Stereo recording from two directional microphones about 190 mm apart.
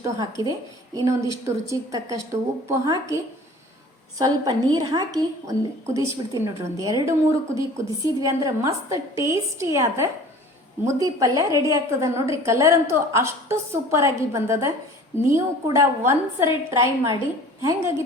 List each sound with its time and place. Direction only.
0.0 s a woman's voice: 15° right (ahead or behind)
4.2 s a woman's voice: 20° right (ahead or behind)